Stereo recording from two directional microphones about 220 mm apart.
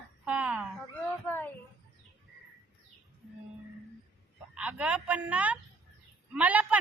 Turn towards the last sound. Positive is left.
turn(degrees=-5)  # may be behind; listen again after turning